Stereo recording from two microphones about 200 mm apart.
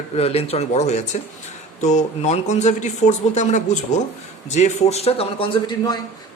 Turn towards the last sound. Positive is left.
turn(degrees=20)  # may be behind; listen again after turning